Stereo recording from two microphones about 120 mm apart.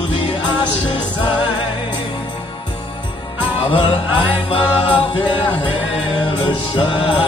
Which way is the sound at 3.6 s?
45° left (ahead or behind).